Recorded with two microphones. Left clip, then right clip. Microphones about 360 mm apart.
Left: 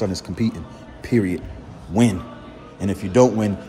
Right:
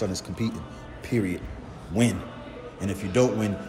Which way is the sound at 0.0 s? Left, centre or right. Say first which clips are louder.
Left 5 dB; left.